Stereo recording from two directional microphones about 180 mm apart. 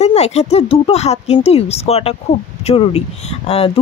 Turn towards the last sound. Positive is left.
turn(degrees=35)  # may be behind; listen again after turning